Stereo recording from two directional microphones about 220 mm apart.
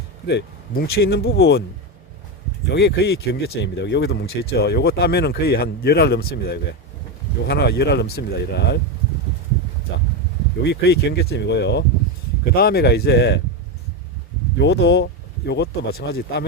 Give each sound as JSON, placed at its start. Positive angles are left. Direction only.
{"t": 0.3, "sound": "speech", "side_deg": 45}
{"t": 2.6, "sound": "speech", "side_deg": 50}
{"t": 10.6, "sound": "speech", "side_deg": 50}
{"t": 14.6, "sound": "speech", "side_deg": 50}